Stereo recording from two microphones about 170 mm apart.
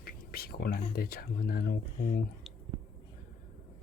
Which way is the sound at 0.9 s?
60° left (ahead or behind).